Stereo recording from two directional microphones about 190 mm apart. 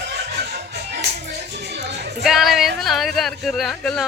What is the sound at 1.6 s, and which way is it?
Music, 60° right (ahead or behind).